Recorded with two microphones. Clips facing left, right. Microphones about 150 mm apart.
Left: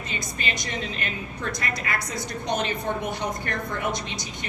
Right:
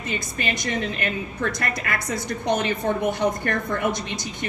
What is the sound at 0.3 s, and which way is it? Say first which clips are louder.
A woman's voice: right 5 dB; 50° right (ahead or behind).